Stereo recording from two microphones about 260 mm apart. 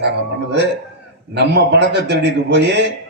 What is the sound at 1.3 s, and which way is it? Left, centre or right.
A man's voice, right.